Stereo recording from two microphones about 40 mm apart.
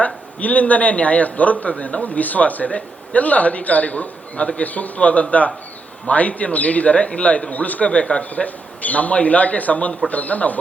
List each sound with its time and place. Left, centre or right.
0.0 s a man's voice: left
7.9 s a man's voice: left